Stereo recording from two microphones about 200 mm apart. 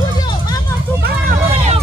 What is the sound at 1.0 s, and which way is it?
Run, 50° right (ahead or behind).